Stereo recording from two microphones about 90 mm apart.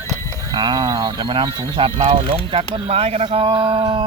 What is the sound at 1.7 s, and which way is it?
Speech, 80° right.